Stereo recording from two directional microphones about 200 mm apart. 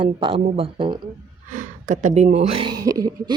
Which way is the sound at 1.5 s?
40° right (ahead or behind).